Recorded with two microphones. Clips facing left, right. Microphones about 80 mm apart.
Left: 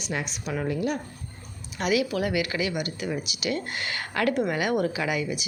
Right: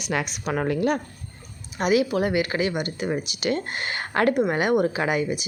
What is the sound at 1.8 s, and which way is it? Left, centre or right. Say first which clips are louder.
Speech: right 4 dB; right.